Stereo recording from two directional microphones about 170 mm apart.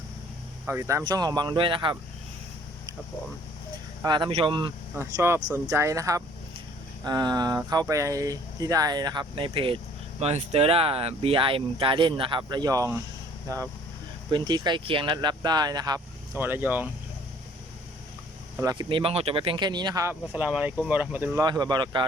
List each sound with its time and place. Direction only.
0.7 s speech: 15° right (ahead or behind)
4.0 s speech: 25° right (ahead or behind)
4.9 s speech: 15° right (ahead or behind)
16.4 s speech: 10° right (ahead or behind)
18.6 s speech: 25° right (ahead or behind)
21.3 s speech: 25° right (ahead or behind)